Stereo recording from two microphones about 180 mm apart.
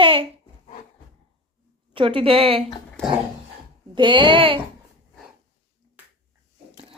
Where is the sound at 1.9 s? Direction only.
30° right (ahead or behind).